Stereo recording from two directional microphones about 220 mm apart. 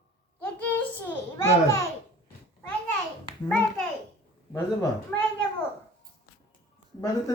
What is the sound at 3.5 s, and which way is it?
Speech, 5° left (ahead or behind).